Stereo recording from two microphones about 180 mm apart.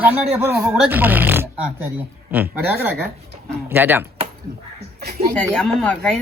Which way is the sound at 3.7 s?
10° right (ahead or behind).